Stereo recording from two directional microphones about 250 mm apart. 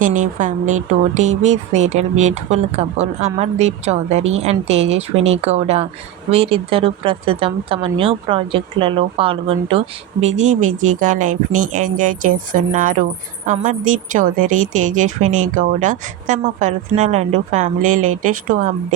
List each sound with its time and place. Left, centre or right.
0.0 s speech: right
10.6 s speech: right
10.8 s speech: right
17.8 s speech: right
18.2 s speech: right